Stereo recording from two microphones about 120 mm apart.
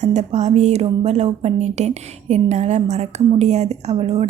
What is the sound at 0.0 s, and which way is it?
Speech, 70° right (ahead or behind).